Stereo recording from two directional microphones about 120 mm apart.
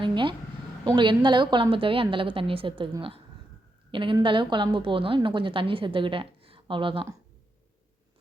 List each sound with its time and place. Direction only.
0.0 s a sound: 40° right (ahead or behind)
0.9 s a woman's voice: 40° right (ahead or behind)
3.9 s a woman's voice: 45° right (ahead or behind)